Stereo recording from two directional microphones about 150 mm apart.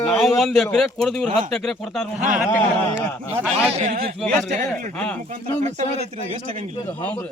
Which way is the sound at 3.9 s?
90° right.